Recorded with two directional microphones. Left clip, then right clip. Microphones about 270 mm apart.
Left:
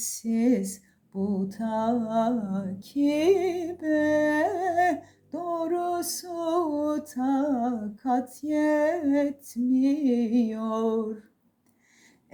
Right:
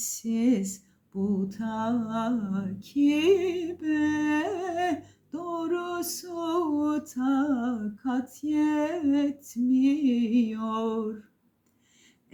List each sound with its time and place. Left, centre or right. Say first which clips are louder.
0.4 s humming: left 1 dB; centre
5.3 s a sound: left 4 dB; centre
5.5 s humming: left 2 dB; centre